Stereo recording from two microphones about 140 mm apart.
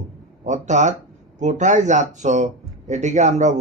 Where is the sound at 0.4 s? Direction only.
55° right (ahead or behind).